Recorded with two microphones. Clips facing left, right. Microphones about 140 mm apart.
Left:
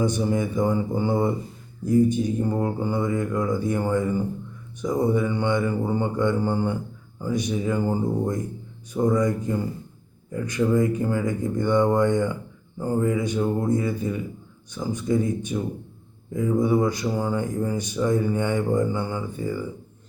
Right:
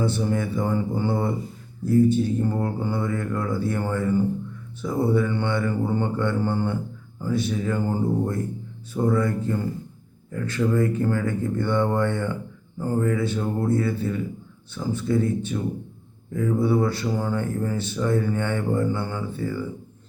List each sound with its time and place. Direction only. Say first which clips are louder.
0.0 s speech: left 1 dB; 15° left (ahead or behind)